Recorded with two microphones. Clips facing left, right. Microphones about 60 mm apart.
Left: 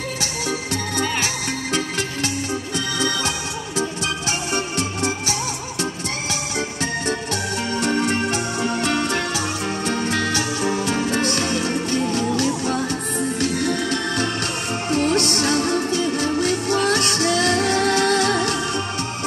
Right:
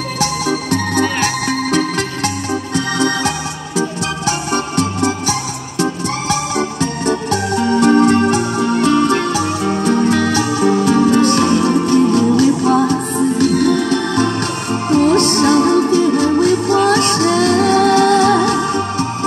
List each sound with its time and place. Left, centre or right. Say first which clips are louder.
0.7 s music: right 7 dB; right
4.3 s music: right 6 dB; right